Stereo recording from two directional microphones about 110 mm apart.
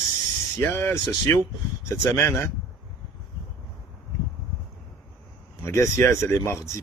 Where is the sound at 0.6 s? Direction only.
20° left (ahead or behind).